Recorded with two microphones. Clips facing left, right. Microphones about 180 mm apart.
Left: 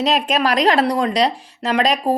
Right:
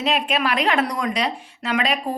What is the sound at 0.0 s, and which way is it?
A woman's voice, 40° left (ahead or behind).